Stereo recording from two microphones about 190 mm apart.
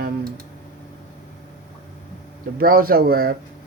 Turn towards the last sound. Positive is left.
turn(degrees=-55)  # may be behind; listen again after turning